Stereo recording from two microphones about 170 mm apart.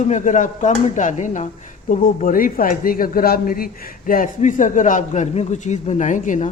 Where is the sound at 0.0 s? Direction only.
45° left (ahead or behind).